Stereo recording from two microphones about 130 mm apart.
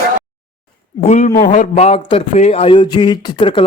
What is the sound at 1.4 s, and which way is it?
A man's voice, 75° left (ahead or behind).